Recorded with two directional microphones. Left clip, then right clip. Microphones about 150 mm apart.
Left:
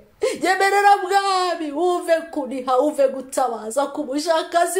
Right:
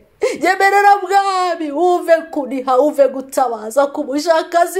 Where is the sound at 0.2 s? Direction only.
50° right (ahead or behind).